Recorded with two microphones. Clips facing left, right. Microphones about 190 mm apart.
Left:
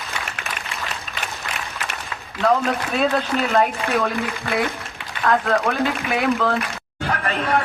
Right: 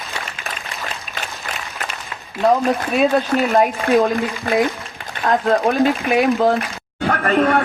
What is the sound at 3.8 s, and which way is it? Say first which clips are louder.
Speech: right 7 dB; 35° right (ahead or behind).